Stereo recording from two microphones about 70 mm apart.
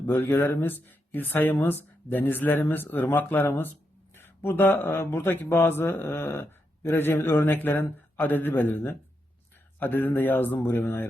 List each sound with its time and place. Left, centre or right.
0.0 s speech: left